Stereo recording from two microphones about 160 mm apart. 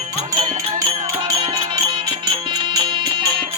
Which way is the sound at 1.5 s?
25° right (ahead or behind).